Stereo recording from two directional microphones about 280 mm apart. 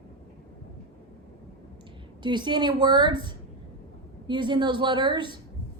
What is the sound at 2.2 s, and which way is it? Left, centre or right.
A woman's voice, centre.